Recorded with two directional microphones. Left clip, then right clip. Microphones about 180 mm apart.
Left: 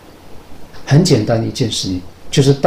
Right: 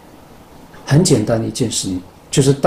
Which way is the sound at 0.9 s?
15° right (ahead or behind).